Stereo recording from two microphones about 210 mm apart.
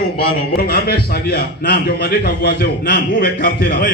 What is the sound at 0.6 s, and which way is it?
A man's voice, 45° left (ahead or behind).